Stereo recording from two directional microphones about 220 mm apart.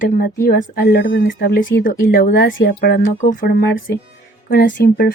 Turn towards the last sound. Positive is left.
turn(degrees=40)  # may be behind; listen again after turning